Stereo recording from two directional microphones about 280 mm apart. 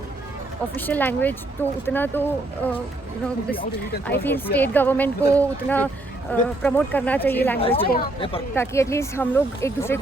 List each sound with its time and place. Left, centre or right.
0.8 s speech: centre
4.0 s speech: centre
7.6 s speech: centre
8.5 s speech: centre